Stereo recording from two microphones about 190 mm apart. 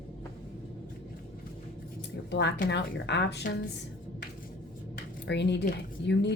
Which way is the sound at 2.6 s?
65° left (ahead or behind).